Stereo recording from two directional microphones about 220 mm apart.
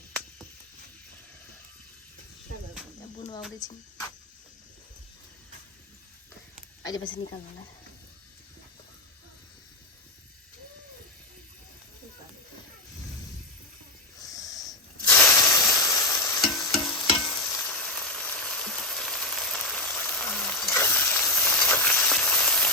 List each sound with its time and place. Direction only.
3.6 s speech: 15° left (ahead or behind)
6.8 s a woman's voice: 20° left (ahead or behind)
14.2 s snake: 15° left (ahead or behind)
15.8 s stir: 15° left (ahead or behind)
16.5 s frying: 20° left (ahead or behind); by 22.7 s centre (ahead or behind)